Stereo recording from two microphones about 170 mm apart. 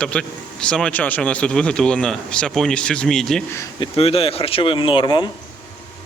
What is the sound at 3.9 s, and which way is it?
Speech, 35° left (ahead or behind).